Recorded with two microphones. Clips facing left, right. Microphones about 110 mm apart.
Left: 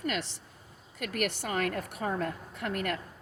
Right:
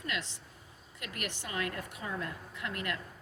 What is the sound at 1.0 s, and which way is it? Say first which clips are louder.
A woman's voice: left 9 dB; 55° left (ahead or behind).